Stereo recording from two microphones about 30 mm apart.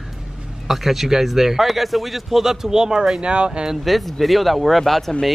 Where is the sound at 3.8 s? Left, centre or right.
Centre.